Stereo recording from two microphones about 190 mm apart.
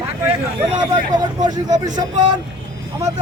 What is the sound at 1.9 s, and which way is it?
Speech, 40° right (ahead or behind).